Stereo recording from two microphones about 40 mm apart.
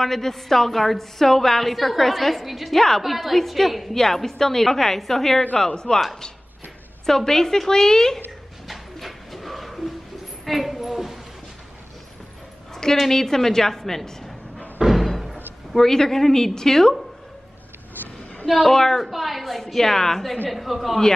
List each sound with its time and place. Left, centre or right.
0.0 s a woman's voice: centre
5.7 s speech: centre
7.1 s a woman's voice: centre
8.6 s dog: centre
10.4 s a sound: centre
13.1 s a woman's voice: centre
14.8 s a sound: centre
15.0 s door: centre
15.7 s a woman's voice: centre
18.5 s a woman's voice: centre